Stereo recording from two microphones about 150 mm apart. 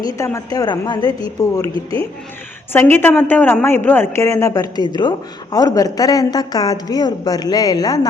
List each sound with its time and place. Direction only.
0.3 s speech: 20° left (ahead or behind)
2.7 s speech: 15° left (ahead or behind)